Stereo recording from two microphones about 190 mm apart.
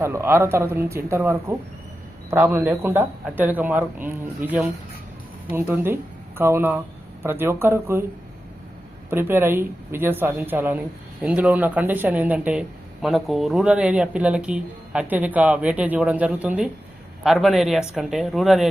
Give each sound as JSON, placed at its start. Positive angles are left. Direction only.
{"t": 0.0, "sound": "speech", "side_deg": -15}
{"t": 9.0, "sound": "speech", "side_deg": -10}